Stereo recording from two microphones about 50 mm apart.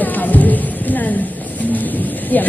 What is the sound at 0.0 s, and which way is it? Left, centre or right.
Music, left.